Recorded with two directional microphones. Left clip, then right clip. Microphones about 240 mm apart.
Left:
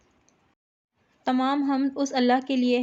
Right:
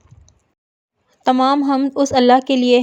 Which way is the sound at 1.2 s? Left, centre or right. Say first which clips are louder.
Right 10 dB; right.